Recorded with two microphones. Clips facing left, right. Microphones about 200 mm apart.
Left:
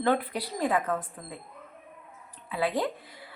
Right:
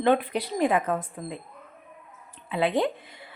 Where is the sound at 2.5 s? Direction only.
25° right (ahead or behind).